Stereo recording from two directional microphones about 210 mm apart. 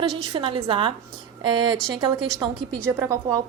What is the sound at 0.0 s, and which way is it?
A woman's voice, 20° right (ahead or behind).